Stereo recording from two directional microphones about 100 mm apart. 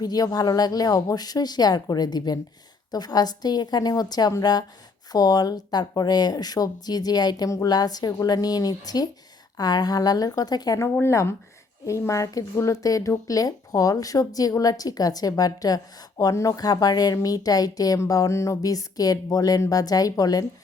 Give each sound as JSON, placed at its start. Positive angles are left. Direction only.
{"t": 0.0, "sound": "speech", "side_deg": 40}
{"t": 11.0, "sound": "speech", "side_deg": 30}